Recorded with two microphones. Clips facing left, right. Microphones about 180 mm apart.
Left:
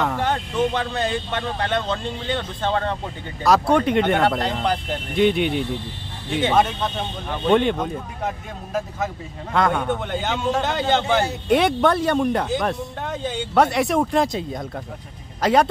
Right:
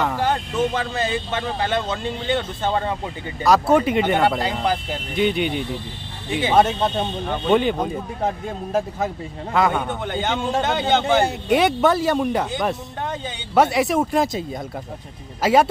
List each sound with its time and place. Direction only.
0.0 s speech: centre (ahead or behind)
6.5 s speech: 30° right (ahead or behind)
7.4 s speech: centre (ahead or behind)
9.5 s speech: centre (ahead or behind)
15.4 s speech: 5° right (ahead or behind)